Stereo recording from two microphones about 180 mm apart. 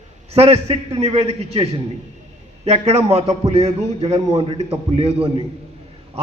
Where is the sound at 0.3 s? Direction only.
35° right (ahead or behind).